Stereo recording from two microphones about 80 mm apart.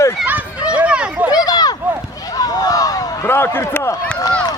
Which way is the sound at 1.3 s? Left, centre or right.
Left.